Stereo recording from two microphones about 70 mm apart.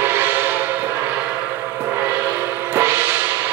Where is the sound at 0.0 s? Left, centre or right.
Right.